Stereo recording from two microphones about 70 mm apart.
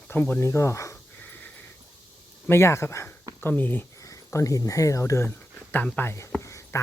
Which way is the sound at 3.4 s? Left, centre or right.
Left.